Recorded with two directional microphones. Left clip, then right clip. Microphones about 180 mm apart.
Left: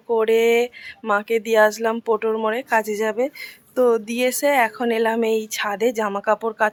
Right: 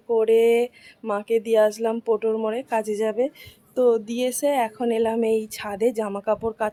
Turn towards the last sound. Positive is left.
turn(degrees=5)  # may be behind; listen again after turning